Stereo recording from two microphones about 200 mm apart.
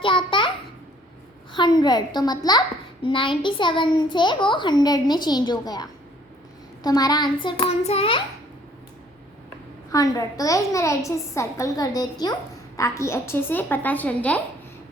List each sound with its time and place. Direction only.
0.0 s a sound: 25° left (ahead or behind)
1.5 s a child's voice: 20° left (ahead or behind)
9.9 s a woman's voice: 20° left (ahead or behind)